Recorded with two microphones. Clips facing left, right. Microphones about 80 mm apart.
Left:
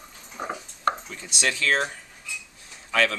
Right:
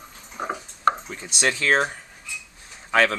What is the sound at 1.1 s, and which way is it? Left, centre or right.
Speech, right.